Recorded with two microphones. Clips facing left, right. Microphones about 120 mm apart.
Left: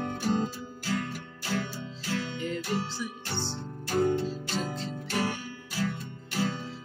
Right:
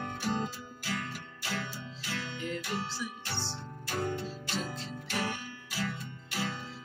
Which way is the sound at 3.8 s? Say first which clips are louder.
Left 8 dB; 35° left (ahead or behind).